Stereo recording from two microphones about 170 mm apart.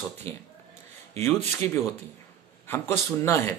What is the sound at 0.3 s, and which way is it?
Speech, 15° left (ahead or behind).